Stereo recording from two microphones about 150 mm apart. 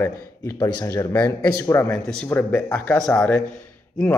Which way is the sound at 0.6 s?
25° left (ahead or behind).